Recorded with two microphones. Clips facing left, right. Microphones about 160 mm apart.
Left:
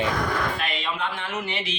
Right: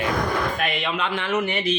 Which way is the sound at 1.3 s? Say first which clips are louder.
Right 7 dB; 50° right (ahead or behind).